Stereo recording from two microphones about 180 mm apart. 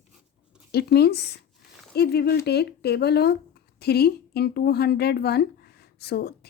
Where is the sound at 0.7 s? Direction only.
60° left (ahead or behind).